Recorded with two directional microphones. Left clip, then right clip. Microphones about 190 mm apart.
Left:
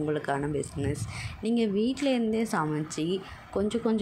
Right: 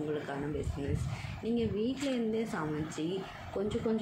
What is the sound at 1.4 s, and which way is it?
Speech, 50° left (ahead or behind).